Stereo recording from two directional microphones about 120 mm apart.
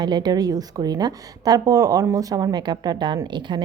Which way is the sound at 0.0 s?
35° right (ahead or behind).